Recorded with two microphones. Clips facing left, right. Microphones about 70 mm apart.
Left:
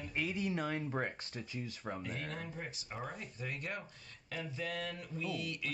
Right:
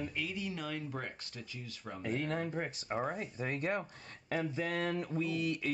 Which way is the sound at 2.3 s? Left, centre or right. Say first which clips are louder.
Right 8 dB; right.